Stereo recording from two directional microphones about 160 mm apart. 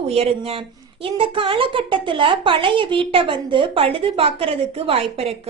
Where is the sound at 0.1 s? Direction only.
40° right (ahead or behind).